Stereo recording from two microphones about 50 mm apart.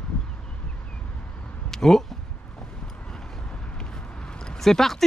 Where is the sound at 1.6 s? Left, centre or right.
Centre.